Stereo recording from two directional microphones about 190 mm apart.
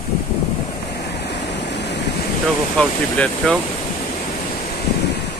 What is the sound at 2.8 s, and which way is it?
Speech, 5° left (ahead or behind).